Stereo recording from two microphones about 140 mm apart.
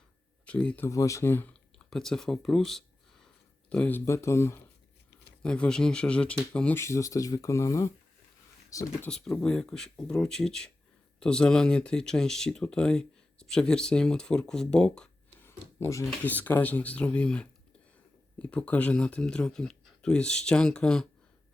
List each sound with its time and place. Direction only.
0.4 s speech: 10° left (ahead or behind)
0.9 s speech: 20° left (ahead or behind)
1.9 s speech: 5° left (ahead or behind)
5.4 s speech: 5° left (ahead or behind)
6.8 s speech: 20° left (ahead or behind)
9.0 s speech: 5° left (ahead or behind)
15.4 s a sound: 20° left (ahead or behind)
16.0 s speech: 10° left (ahead or behind)